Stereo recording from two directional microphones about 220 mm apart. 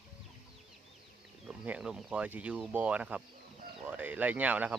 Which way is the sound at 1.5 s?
5° right (ahead or behind).